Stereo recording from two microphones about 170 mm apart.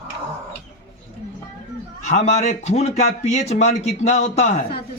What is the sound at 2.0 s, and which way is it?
Speech, 45° left (ahead or behind).